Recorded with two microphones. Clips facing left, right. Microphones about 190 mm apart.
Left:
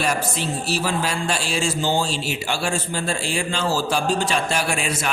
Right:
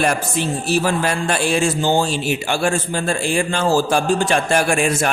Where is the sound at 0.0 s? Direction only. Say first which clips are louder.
Right 4 dB; 55° right (ahead or behind).